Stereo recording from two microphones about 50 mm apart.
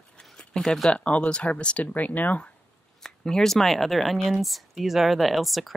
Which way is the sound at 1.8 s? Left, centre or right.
Left.